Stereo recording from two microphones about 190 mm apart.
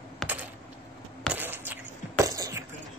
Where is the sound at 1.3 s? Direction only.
10° right (ahead or behind).